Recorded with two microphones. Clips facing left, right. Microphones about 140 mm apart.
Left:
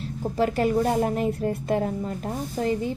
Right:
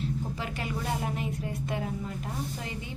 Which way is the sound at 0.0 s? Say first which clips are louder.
Left 9 dB; 40° left (ahead or behind).